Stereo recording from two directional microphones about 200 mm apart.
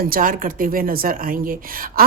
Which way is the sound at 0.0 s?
45° right (ahead or behind).